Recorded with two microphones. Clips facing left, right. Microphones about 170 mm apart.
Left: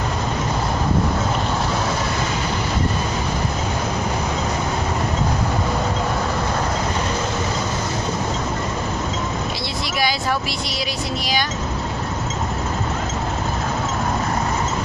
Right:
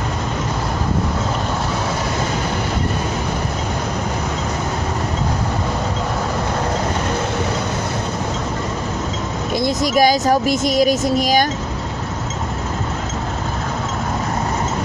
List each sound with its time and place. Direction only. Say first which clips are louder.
9.6 s speech: right 13 dB; 45° right (ahead or behind)